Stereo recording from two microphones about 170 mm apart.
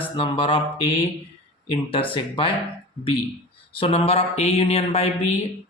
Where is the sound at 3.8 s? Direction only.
35° left (ahead or behind).